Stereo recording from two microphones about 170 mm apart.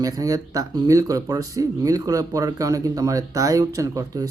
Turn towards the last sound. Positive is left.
turn(degrees=-20)  # may be behind; listen again after turning